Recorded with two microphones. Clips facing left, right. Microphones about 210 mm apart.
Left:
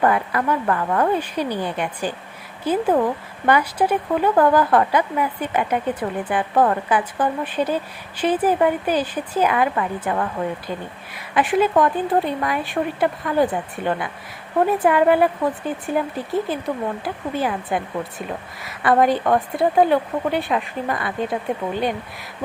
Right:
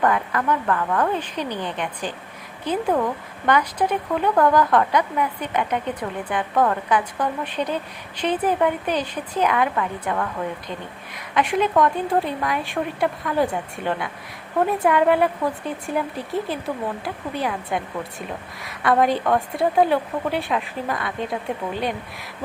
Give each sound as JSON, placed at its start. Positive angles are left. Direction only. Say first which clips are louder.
{"t": 0.0, "sound": "speech", "louder": "left 2 dB", "side_deg": 10}
{"t": 6.5, "sound": "a woman's voice", "louder": "left 2 dB", "side_deg": 20}
{"t": 6.9, "sound": "a woman's voice", "louder": "left 2 dB", "side_deg": 5}
{"t": 11.3, "sound": "a woman's voice", "louder": "left 2 dB", "side_deg": 5}